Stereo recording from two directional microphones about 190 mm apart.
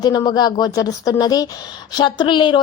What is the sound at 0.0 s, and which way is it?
A woman's voice, 20° left (ahead or behind).